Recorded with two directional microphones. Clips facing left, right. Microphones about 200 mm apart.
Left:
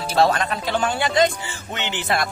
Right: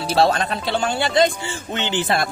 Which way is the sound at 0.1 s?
30° right (ahead or behind).